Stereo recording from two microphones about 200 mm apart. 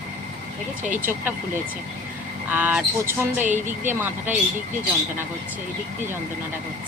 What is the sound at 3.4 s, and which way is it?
Speech, 35° right (ahead or behind).